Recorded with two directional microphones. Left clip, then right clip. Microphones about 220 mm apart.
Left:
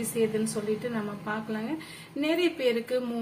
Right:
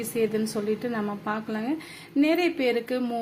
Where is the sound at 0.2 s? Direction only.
35° right (ahead or behind).